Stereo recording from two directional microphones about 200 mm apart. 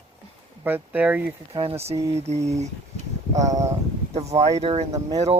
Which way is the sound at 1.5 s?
30° right (ahead or behind).